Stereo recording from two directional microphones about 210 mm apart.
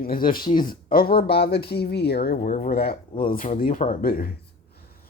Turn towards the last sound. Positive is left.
turn(degrees=45)  # may be behind; listen again after turning